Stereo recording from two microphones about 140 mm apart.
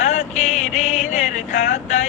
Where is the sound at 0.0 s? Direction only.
60° left (ahead or behind).